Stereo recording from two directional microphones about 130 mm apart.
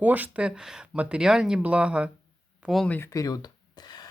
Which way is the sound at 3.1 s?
25° left (ahead or behind).